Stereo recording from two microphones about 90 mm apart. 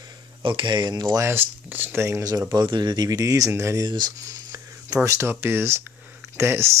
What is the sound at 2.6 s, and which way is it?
Speech, 55° right (ahead or behind).